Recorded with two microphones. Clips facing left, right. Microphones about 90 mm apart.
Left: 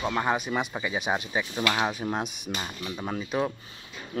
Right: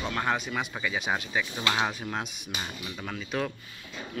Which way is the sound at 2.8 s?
30° left (ahead or behind).